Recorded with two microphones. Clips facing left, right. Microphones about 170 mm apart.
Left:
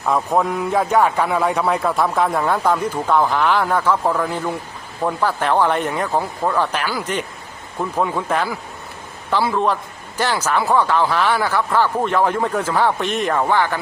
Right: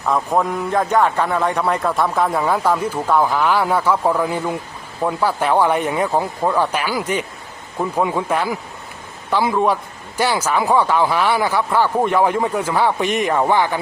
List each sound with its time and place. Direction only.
0.1 s a man's voice: centre (ahead or behind); by 13.7 s 15° right (ahead or behind)